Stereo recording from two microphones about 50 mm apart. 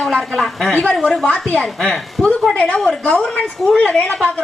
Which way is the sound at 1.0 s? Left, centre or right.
Left.